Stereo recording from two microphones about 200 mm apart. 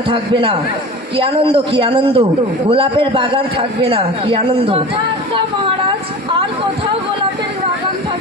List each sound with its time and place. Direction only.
0.1 s a man's voice: 25° right (ahead or behind)